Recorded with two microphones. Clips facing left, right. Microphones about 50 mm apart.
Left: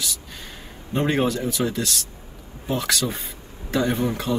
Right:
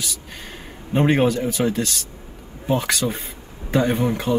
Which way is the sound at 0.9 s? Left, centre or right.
Right.